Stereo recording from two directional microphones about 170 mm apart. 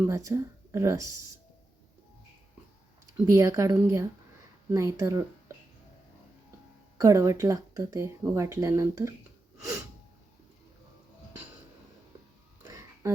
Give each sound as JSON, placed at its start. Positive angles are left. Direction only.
{"t": 0.0, "sound": "speech", "side_deg": -15}
{"t": 3.2, "sound": "speech", "side_deg": -20}
{"t": 7.0, "sound": "speech", "side_deg": -15}
{"t": 12.6, "sound": "a sound", "side_deg": -20}